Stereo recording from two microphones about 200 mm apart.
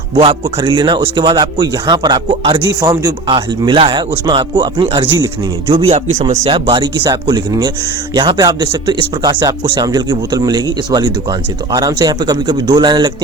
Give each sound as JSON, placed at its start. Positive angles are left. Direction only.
{"t": 0.2, "sound": "speech", "side_deg": -25}
{"t": 6.1, "sound": "speech", "side_deg": -35}